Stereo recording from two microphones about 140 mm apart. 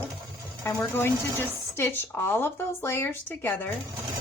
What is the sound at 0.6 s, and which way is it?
Speech, 15° left (ahead or behind).